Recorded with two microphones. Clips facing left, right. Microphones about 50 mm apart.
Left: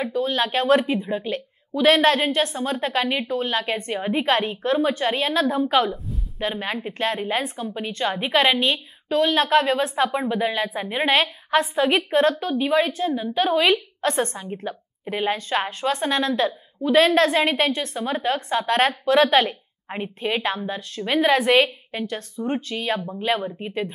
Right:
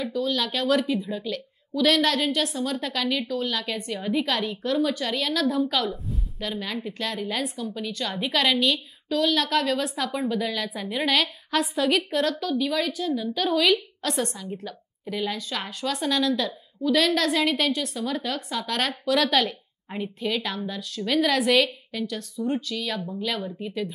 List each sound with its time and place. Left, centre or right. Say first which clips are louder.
0.0 s a woman's voice: left 3 dB; left
5.9 s a woman's voice: left 2 dB; centre
6.4 s a woman's voice: left 4 dB; left